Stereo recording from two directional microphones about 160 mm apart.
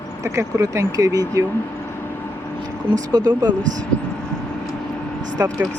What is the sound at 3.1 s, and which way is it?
Speech, 25° right (ahead or behind).